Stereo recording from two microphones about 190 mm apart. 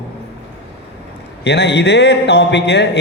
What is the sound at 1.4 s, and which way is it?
A man's voice, 65° left (ahead or behind).